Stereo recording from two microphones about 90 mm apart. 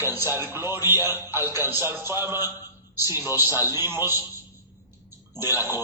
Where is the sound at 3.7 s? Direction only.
30° right (ahead or behind).